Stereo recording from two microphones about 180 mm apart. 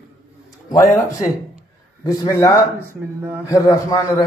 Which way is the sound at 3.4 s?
20° left (ahead or behind).